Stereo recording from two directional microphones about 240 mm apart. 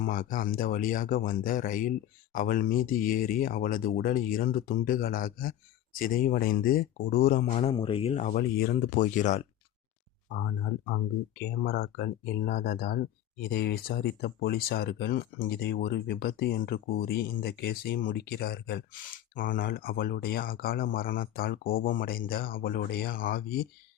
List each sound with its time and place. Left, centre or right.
0.0 s speech: left